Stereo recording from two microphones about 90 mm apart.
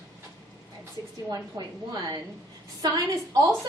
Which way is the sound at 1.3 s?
45° right (ahead or behind).